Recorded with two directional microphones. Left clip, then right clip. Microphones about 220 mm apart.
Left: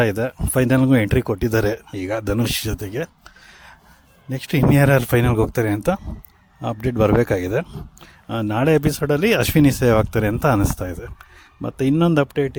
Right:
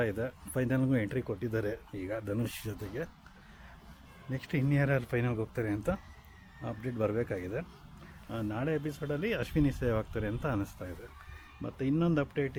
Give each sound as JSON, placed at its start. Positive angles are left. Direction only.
{"t": 0.0, "sound": "speech", "side_deg": 50}
{"t": 4.3, "sound": "speech", "side_deg": 45}